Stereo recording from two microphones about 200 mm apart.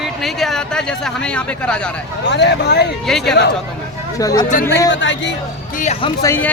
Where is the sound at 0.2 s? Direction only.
Centre (ahead or behind).